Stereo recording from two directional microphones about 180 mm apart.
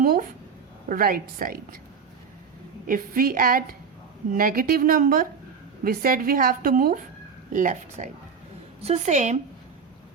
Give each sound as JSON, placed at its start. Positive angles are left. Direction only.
{"t": 0.0, "sound": "a sound", "side_deg": -55}
{"t": 0.9, "sound": "a woman's voice", "side_deg": -50}
{"t": 2.8, "sound": "a woman's voice", "side_deg": -50}